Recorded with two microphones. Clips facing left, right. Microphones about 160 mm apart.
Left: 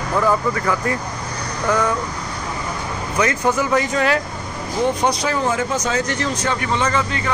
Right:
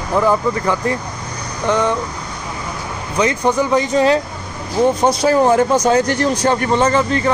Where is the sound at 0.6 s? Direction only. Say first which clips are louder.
Right 3 dB; 25° right (ahead or behind).